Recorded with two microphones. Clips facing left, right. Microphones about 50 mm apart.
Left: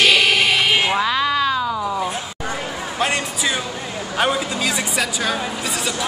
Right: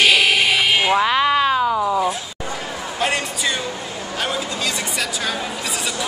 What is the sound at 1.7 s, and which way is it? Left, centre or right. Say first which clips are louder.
Cat: right 4 dB; centre.